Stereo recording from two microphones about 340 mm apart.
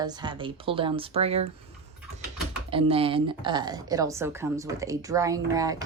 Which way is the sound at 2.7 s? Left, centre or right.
Centre.